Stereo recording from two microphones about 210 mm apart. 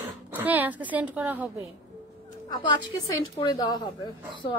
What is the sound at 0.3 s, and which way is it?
Speech, 10° right (ahead or behind).